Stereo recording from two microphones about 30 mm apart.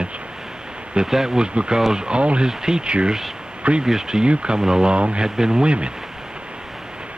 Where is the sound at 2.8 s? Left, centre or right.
Right.